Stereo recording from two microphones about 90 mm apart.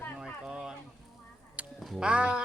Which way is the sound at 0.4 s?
10° right (ahead or behind).